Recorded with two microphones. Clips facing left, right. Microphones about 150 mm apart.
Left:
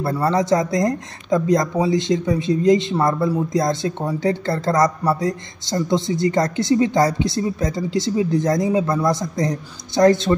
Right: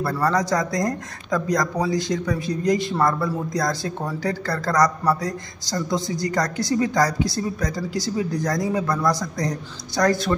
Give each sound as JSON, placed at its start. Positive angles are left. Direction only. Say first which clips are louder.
{"t": 0.0, "sound": "speech", "louder": "left 2 dB", "side_deg": 25}